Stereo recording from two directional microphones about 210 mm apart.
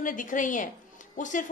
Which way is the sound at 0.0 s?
40° left (ahead or behind).